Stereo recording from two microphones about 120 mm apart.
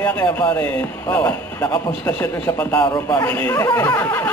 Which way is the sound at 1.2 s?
20° left (ahead or behind).